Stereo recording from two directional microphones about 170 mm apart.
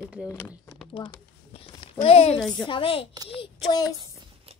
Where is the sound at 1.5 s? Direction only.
30° left (ahead or behind).